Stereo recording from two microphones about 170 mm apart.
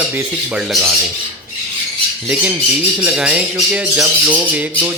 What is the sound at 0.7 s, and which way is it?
Speech, centre (ahead or behind).